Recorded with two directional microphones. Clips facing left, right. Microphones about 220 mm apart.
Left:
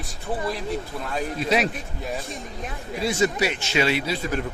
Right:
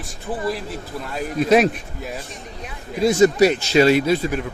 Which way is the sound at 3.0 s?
40° right (ahead or behind).